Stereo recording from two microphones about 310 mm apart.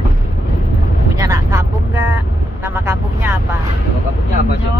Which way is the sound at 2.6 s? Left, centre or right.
Centre.